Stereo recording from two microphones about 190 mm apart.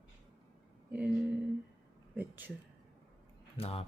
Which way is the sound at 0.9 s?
5° right (ahead or behind).